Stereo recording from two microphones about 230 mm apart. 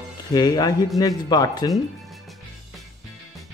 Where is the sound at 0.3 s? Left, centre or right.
Centre.